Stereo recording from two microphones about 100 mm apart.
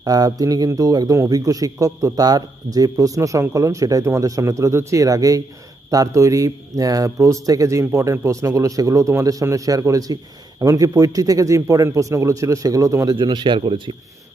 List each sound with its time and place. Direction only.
0.0 s a man's voice: 40° right (ahead or behind)
13.1 s speech: 50° right (ahead or behind)